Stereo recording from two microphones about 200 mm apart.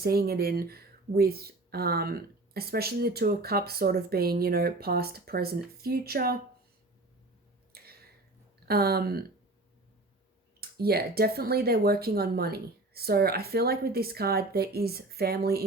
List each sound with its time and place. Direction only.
0.0 s speech: 50° right (ahead or behind)
7.7 s a sound: 50° right (ahead or behind)
8.6 s speech: 50° right (ahead or behind)
10.6 s speech: 50° right (ahead or behind)